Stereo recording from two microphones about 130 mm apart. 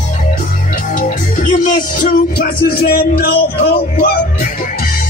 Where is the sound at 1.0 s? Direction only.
80° left.